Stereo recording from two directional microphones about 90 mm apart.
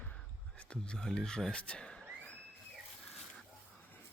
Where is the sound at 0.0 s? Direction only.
15° left (ahead or behind).